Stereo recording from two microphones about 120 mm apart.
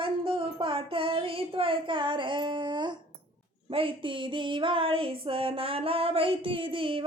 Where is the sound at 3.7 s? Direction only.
45° right (ahead or behind).